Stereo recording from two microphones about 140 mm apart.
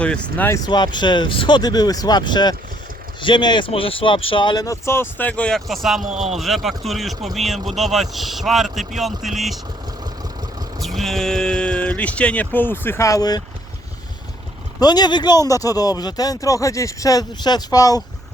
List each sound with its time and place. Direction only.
0.0 s speech: 10° left (ahead or behind)
0.6 s speech: 30° left (ahead or behind); by 9.6 s centre (ahead or behind)
10.8 s speech: centre (ahead or behind); by 13.4 s 25° left (ahead or behind)
14.8 s speech: 30° left (ahead or behind)